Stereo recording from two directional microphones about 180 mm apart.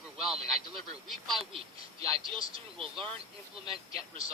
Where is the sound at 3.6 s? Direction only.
30° right (ahead or behind).